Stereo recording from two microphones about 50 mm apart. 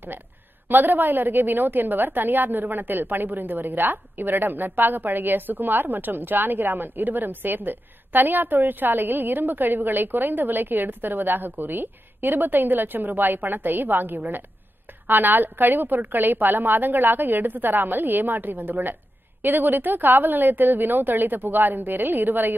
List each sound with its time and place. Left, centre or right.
0.7 s a woman's voice: right